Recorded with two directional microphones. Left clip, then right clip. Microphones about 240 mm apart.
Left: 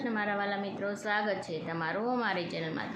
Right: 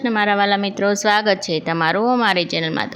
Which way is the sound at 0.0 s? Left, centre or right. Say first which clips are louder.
Right 15 dB; right.